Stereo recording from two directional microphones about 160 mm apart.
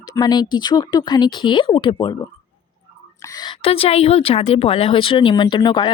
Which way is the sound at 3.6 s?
35° left (ahead or behind).